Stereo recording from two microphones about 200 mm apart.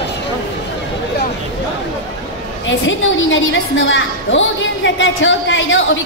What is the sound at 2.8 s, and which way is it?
A woman's voice, 70° left (ahead or behind).